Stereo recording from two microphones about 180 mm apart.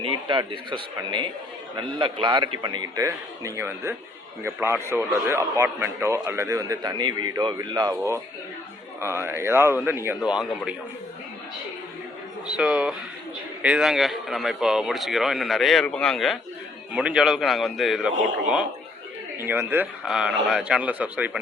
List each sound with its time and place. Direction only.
0.0 s a man's voice: 30° right (ahead or behind); by 10.8 s 5° right (ahead or behind)
12.5 s a man's voice: 5° right (ahead or behind)
19.4 s a man's voice: 10° right (ahead or behind)